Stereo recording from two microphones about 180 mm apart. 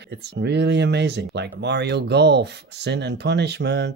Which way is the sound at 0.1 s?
70° right (ahead or behind).